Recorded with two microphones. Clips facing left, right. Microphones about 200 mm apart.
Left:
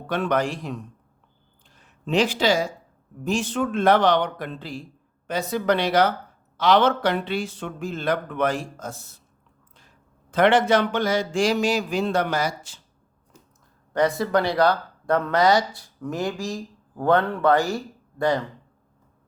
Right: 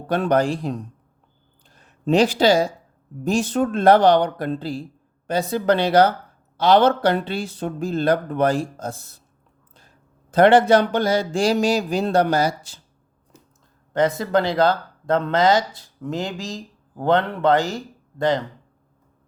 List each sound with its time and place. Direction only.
0.1 s speech: 35° right (ahead or behind)
10.3 s speech: 35° right (ahead or behind)
13.9 s speech: 25° right (ahead or behind)